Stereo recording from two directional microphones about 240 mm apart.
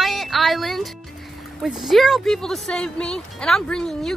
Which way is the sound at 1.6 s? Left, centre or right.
Centre.